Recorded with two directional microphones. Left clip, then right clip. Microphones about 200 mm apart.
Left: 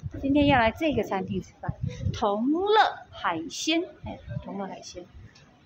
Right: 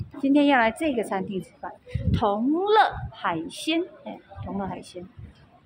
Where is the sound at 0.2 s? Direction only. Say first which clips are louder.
Right 2 dB; 10° right (ahead or behind).